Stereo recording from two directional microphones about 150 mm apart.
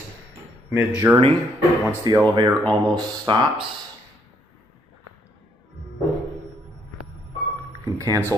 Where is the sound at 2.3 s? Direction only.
25° right (ahead or behind).